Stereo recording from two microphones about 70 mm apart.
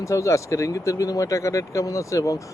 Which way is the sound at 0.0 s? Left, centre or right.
Left.